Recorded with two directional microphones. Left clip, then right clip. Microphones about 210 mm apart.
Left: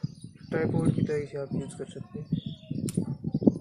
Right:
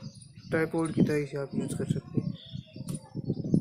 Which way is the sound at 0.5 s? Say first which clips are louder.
Right 1 dB; 20° right (ahead or behind).